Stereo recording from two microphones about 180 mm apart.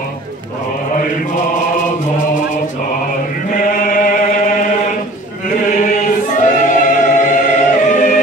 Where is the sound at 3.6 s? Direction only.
45° left (ahead or behind).